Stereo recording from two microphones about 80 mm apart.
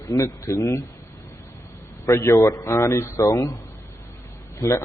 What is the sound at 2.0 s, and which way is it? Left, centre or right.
A man's voice, left.